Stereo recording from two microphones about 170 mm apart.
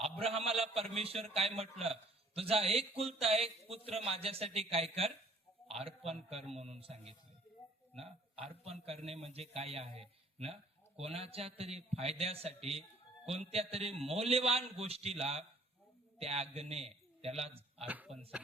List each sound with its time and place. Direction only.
0.0 s a man's voice: 35° right (ahead or behind)
17.8 s speech: 10° right (ahead or behind)